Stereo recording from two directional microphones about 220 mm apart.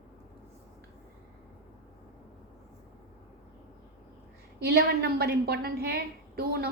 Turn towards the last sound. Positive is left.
turn(degrees=-45)  # may be behind; listen again after turning